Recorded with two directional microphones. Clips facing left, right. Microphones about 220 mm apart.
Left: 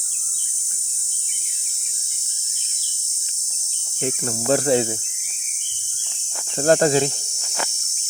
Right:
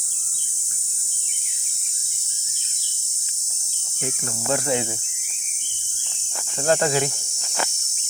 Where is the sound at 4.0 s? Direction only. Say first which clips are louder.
Left 5 dB; 30° left (ahead or behind).